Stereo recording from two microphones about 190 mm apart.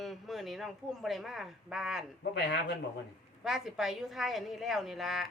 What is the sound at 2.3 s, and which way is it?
Speech, 65° left (ahead or behind).